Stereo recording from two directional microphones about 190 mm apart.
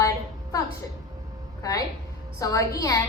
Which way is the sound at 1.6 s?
15° left (ahead or behind).